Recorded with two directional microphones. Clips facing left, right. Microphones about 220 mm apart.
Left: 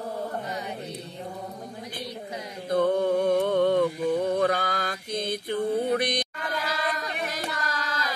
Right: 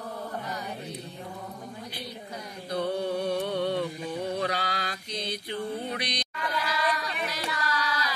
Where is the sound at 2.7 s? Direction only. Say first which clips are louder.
Left 6 dB; 50° left (ahead or behind).